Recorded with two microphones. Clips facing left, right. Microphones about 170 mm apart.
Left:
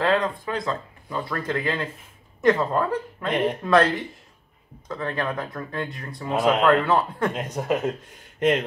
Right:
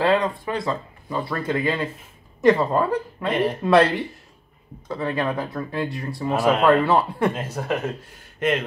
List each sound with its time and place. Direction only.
0.0 s speech: 10° right (ahead or behind)
7.5 s speech: 15° left (ahead or behind)